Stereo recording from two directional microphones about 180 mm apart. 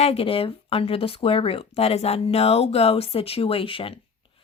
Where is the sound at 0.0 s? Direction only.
30° left (ahead or behind).